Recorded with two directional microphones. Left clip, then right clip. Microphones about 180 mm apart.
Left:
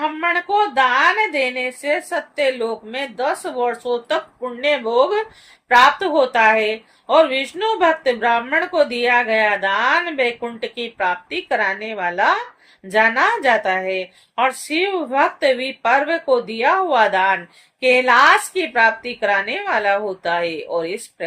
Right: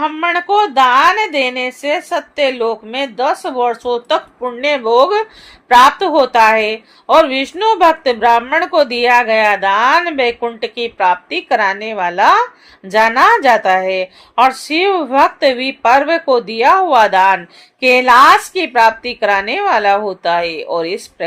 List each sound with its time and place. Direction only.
0.0 s a woman's voice: 55° right (ahead or behind)